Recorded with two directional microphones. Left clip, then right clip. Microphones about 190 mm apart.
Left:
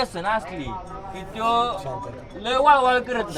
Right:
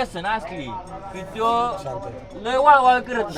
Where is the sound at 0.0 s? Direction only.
15° left (ahead or behind).